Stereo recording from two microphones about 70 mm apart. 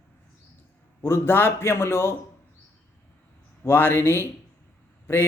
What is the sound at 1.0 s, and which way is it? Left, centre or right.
Speech, left.